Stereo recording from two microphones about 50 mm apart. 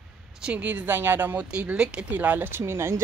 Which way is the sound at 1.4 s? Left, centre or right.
Right.